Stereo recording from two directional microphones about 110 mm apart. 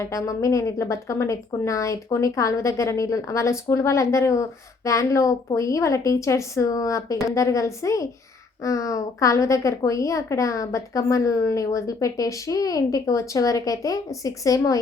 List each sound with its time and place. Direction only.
0.0 s a woman's voice: 30° left (ahead or behind)